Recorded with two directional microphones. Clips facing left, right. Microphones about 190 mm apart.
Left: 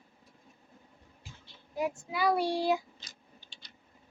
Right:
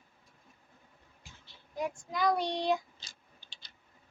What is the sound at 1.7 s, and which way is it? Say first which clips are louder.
Child singing: left 2 dB; 5° left (ahead or behind).